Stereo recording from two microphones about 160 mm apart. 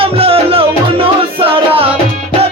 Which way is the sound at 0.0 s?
35° right (ahead or behind).